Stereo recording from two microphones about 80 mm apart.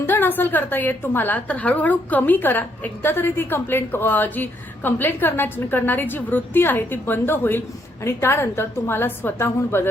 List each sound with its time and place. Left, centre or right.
0.0 s a woman's voice: left